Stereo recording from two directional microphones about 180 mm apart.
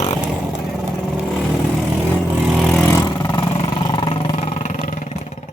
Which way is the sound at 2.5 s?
10° left (ahead or behind).